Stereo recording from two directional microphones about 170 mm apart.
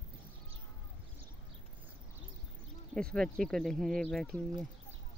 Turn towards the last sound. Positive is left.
turn(degrees=5)  # may be behind; listen again after turning